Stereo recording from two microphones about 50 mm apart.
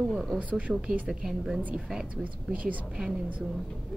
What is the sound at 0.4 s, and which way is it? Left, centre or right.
Speech, right.